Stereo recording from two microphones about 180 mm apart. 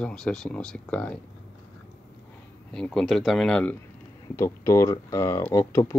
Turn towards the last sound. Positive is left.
turn(degrees=15)  # may be behind; listen again after turning